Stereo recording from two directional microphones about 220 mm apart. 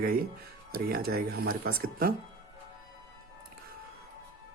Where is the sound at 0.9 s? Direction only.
45° right (ahead or behind).